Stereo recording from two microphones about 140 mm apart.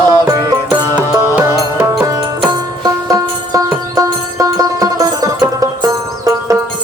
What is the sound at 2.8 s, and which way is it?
Music, 25° right (ahead or behind).